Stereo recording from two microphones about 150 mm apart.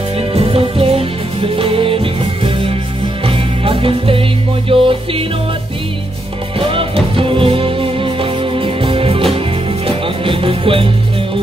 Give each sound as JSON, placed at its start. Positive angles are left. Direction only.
{"t": 0.2, "sound": "music", "side_deg": -40}
{"t": 6.7, "sound": "music", "side_deg": -35}